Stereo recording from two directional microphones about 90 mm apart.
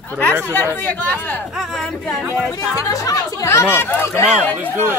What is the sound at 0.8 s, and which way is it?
Speech, 20° left (ahead or behind).